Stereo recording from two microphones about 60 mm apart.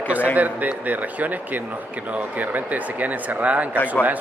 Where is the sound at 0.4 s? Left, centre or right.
Right.